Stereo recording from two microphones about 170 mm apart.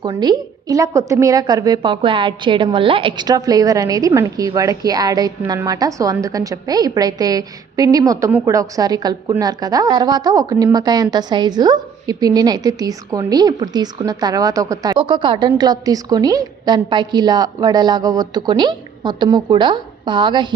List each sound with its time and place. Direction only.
0.0 s a woman's voice: 25° right (ahead or behind)